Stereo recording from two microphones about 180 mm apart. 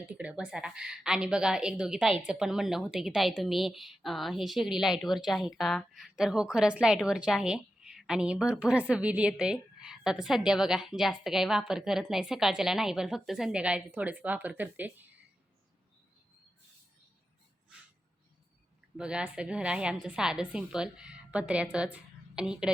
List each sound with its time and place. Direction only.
0.1 s a woman's voice: 5° right (ahead or behind)
18.9 s a woman's voice: 5° right (ahead or behind)